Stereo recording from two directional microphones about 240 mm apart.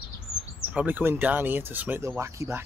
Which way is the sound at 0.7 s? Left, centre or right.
Centre.